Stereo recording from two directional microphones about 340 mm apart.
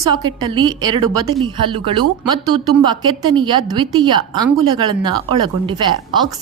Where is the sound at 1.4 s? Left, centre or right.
Centre.